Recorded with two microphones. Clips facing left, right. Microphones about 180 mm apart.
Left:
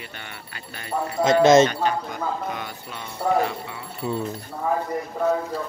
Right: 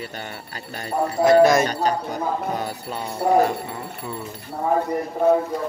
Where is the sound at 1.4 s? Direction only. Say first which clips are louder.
Left 3 dB; 20° left (ahead or behind).